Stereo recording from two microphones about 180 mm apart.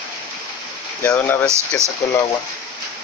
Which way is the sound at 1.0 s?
15° left (ahead or behind).